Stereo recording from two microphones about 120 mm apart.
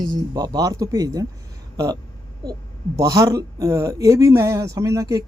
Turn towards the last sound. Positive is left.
turn(degrees=-30)  # may be behind; listen again after turning